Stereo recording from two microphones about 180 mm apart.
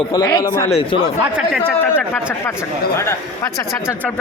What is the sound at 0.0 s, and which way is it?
Speech, 20° left (ahead or behind).